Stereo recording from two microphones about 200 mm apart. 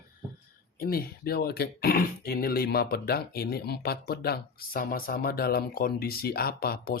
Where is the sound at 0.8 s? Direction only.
50° left (ahead or behind).